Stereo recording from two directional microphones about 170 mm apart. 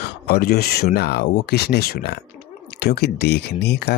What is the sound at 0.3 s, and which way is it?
Speech, 65° left (ahead or behind).